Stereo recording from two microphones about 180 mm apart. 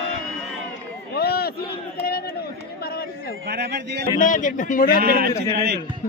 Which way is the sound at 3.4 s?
65° right (ahead or behind).